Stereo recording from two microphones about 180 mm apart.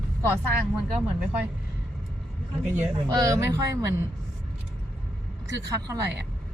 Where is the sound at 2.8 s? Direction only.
15° right (ahead or behind).